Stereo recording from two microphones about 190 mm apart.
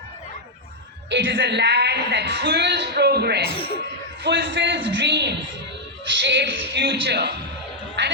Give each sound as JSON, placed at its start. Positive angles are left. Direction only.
{"t": 1.1, "sound": "speech", "side_deg": -70}
{"t": 8.0, "sound": "music", "side_deg": -70}